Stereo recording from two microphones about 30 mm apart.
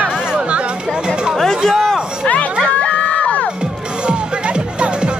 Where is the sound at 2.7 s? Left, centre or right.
Left.